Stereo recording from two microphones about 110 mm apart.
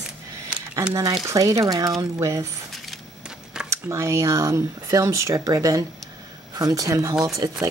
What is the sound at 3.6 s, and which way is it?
A woman's voice, 25° right (ahead or behind).